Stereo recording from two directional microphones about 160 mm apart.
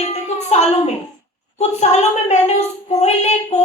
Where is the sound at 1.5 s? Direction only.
45° left (ahead or behind).